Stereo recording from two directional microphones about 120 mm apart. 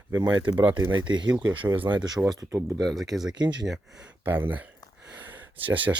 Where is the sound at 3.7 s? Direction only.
5° right (ahead or behind).